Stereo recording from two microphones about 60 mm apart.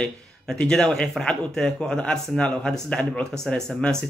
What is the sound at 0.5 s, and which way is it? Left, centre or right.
Speech, centre.